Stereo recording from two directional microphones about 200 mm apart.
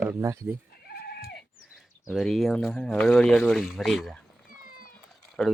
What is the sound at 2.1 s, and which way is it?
Speech, centre (ahead or behind).